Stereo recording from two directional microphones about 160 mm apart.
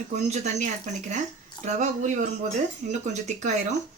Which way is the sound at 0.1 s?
45° right (ahead or behind).